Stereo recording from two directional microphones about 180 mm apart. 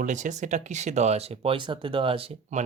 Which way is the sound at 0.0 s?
45° right (ahead or behind).